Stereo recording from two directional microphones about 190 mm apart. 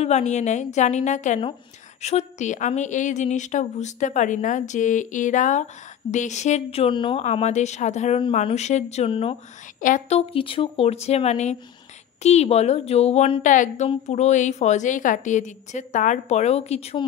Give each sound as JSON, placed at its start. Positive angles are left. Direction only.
{"t": 0.0, "sound": "a woman's voice", "side_deg": 35}
{"t": 9.8, "sound": "a woman's voice", "side_deg": 40}